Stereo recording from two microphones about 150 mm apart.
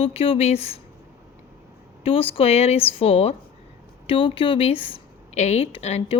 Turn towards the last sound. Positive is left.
turn(degrees=40)  # may be behind; listen again after turning